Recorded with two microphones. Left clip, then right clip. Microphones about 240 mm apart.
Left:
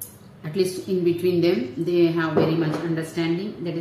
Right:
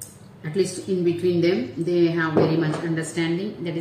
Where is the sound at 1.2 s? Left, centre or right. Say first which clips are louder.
Even; centre.